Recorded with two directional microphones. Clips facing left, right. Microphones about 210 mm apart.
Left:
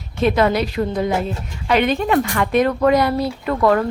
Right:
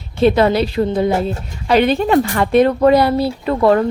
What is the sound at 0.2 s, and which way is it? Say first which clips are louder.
A woman's voice: right 4 dB; 30° right (ahead or behind).